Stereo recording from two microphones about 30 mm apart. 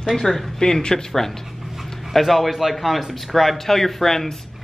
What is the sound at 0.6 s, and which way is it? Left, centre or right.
Speech, left.